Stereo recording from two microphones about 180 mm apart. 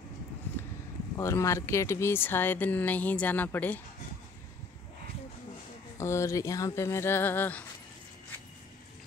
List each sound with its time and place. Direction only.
1.1 s speech: 15° left (ahead or behind)
5.9 s speech: 15° left (ahead or behind)